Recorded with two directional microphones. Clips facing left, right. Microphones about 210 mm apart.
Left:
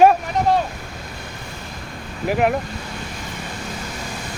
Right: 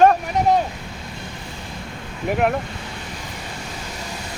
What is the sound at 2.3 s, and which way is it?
Speech, centre (ahead or behind).